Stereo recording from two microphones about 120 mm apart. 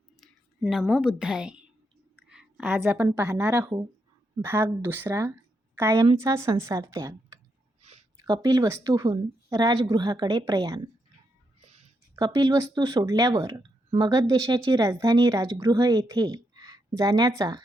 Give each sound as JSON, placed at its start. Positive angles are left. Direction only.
{"t": 0.7, "sound": "a woman's voice", "side_deg": -5}
{"t": 2.1, "sound": "a sound", "side_deg": -10}
{"t": 2.8, "sound": "a woman's voice", "side_deg": -20}
{"t": 12.1, "sound": "speech", "side_deg": -35}